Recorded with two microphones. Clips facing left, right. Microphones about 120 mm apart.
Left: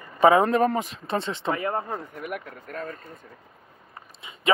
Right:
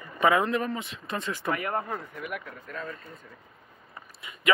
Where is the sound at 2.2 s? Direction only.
45° left (ahead or behind).